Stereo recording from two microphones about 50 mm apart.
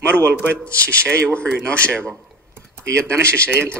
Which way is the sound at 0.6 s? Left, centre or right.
Left.